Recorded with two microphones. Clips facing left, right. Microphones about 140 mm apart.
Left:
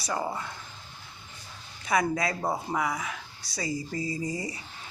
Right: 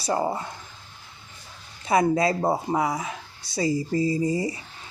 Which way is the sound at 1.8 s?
25° right (ahead or behind).